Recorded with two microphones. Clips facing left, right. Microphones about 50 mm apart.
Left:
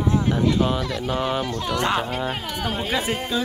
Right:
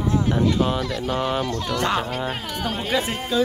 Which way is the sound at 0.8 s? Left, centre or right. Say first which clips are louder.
Right 1 dB; left.